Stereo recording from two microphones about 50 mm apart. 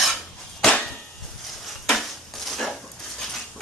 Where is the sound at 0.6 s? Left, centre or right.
Centre.